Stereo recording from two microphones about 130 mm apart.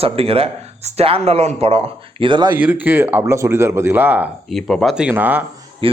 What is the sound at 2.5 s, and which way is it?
Speech, 10° right (ahead or behind).